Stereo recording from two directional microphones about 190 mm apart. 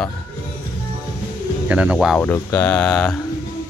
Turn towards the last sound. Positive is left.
turn(degrees=5)  # may be behind; listen again after turning